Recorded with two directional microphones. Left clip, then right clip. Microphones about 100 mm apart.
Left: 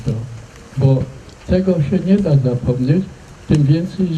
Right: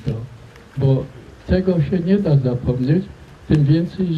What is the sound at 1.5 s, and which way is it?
A man's voice, 60° left (ahead or behind).